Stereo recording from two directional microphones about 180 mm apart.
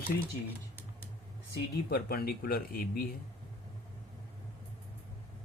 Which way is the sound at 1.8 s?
60° left (ahead or behind).